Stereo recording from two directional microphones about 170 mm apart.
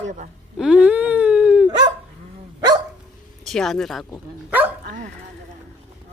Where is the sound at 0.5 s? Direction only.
5° right (ahead or behind).